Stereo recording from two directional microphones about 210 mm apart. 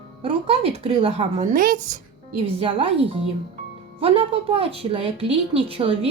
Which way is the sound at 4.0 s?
25° right (ahead or behind).